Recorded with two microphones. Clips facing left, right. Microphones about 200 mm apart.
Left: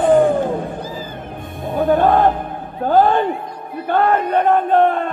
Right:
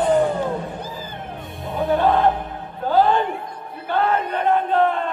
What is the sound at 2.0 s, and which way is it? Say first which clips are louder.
Battle cry: left 3 dB; 55° left (ahead or behind).